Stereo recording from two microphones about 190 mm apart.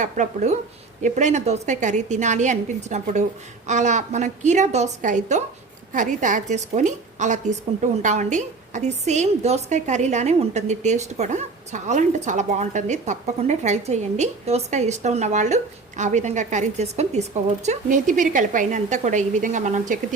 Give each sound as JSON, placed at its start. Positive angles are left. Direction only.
{"t": 0.0, "sound": "a woman's voice", "side_deg": -40}